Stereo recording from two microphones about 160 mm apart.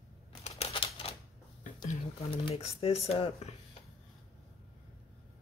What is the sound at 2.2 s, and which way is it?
Speech, 35° left (ahead or behind).